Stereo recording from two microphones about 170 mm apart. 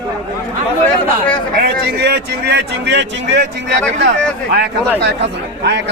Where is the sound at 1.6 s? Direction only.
80° right.